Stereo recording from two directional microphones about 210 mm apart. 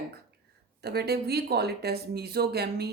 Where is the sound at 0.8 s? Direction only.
50° right (ahead or behind).